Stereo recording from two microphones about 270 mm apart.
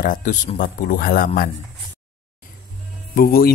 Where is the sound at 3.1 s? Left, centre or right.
Left.